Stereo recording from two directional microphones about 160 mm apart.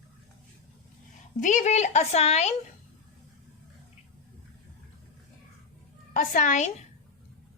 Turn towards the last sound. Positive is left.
turn(degrees=50)  # may be behind; listen again after turning